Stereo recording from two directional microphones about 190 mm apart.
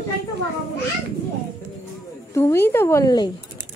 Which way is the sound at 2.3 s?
15° left (ahead or behind).